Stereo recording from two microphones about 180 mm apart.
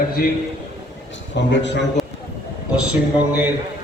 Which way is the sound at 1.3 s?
80° left.